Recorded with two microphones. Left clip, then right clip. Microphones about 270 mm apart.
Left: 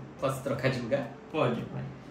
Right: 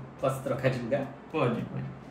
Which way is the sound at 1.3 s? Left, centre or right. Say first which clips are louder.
Even; centre.